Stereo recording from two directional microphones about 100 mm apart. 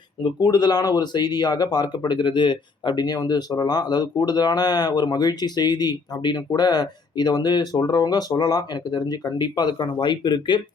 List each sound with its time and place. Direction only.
0.3 s speech: 40° left (ahead or behind)